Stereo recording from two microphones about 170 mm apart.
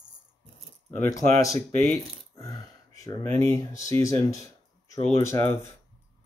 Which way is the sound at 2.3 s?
20° left (ahead or behind).